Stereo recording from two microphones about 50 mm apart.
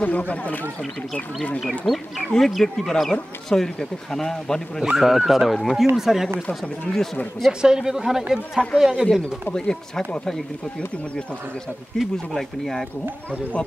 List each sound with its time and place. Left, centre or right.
0.0 s speech: left
1.9 s speech: centre
4.9 s speech: centre
6.6 s speech: centre
7.6 s speech: centre
9.2 s speech: centre
11.9 s speech: centre
13.3 s speech: left